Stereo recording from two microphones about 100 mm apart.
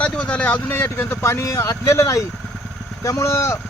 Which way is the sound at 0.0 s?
10° left (ahead or behind).